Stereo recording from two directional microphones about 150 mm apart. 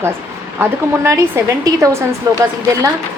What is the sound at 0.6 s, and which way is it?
A woman's voice, 20° right (ahead or behind).